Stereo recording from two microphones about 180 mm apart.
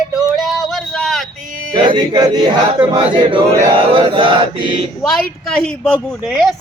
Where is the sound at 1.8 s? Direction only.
25° right (ahead or behind).